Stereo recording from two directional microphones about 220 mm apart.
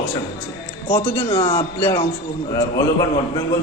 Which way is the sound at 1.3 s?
20° left (ahead or behind).